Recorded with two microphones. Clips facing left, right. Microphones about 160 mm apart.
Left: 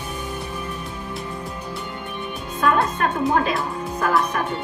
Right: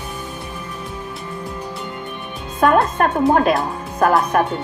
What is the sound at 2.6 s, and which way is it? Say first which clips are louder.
Music: right 5 dB; 50° right (ahead or behind).